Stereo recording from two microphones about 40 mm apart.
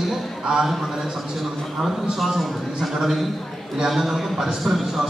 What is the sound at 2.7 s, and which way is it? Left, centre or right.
A man's voice, centre.